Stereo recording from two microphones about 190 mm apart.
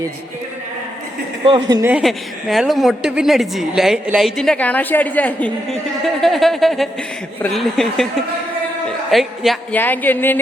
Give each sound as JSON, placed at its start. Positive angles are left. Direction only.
{"t": 1.5, "sound": "speech", "side_deg": -25}
{"t": 1.9, "sound": "a woman's voice", "side_deg": -5}
{"t": 9.0, "sound": "a woman's voice", "side_deg": 0}